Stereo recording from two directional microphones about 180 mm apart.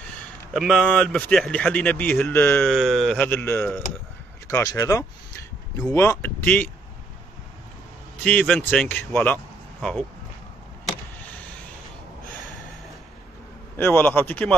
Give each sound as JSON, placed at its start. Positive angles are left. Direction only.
{"t": 0.2, "sound": "speech", "side_deg": 0}
{"t": 2.7, "sound": "speech", "side_deg": 0}
{"t": 4.5, "sound": "a sound", "side_deg": 15}
{"t": 5.9, "sound": "speech", "side_deg": 10}
{"t": 8.2, "sound": "speech", "side_deg": 5}
{"t": 13.7, "sound": "speech", "side_deg": 10}